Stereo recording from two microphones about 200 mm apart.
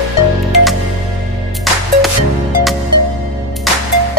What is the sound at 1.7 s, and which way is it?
Music, centre (ahead or behind).